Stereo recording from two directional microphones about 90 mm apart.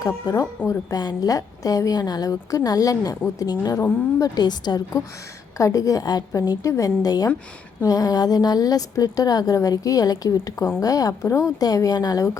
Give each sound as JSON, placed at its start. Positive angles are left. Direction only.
{"t": 0.0, "sound": "a woman's voice", "side_deg": 40}
{"t": 5.5, "sound": "a woman's voice", "side_deg": 40}
{"t": 10.3, "sound": "a woman's voice", "side_deg": 30}